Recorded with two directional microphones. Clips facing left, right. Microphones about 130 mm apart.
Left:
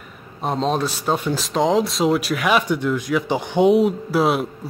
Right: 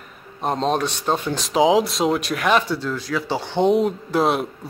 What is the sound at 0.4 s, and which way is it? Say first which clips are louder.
Speech: even; centre (ahead or behind).